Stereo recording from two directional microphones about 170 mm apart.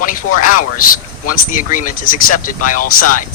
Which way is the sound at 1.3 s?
50° left (ahead or behind).